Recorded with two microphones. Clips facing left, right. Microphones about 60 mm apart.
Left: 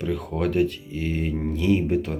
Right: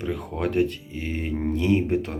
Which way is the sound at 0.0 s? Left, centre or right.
Right.